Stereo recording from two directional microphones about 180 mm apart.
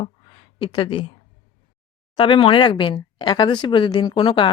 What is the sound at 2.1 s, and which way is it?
Speech, 30° left (ahead or behind).